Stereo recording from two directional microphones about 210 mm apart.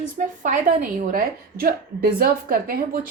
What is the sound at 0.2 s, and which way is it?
A woman's voice, 40° right (ahead or behind).